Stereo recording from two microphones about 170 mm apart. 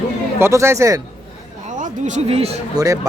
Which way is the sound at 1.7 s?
45° right (ahead or behind).